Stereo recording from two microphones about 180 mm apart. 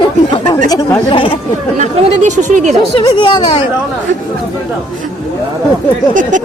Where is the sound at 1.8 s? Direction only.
40° right (ahead or behind).